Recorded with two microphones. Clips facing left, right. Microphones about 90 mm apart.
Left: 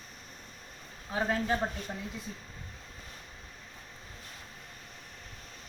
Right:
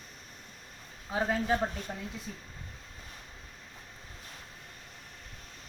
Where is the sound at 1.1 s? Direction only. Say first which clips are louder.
Right 1 dB; 5° right (ahead or behind).